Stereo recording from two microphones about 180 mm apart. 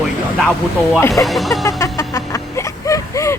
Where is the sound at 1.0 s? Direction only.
15° left (ahead or behind).